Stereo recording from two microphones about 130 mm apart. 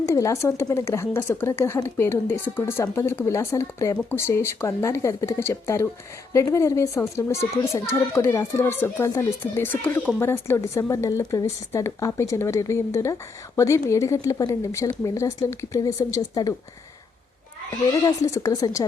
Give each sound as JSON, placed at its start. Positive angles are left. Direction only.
{"t": 0.0, "sound": "a woman's voice", "side_deg": 25}
{"t": 17.7, "sound": "a woman's voice", "side_deg": 30}